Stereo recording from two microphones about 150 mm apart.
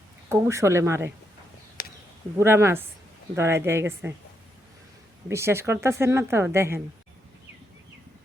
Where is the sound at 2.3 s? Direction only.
15° right (ahead or behind).